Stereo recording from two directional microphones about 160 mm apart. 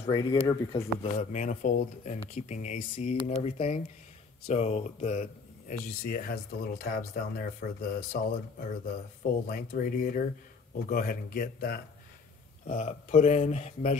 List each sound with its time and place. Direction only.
0.1 s speech: 25° left (ahead or behind)
0.7 s speech: 45° left (ahead or behind); by 8.2 s 65° left (ahead or behind)
9.2 s speech: 65° left (ahead or behind)
12.6 s speech: 50° left (ahead or behind)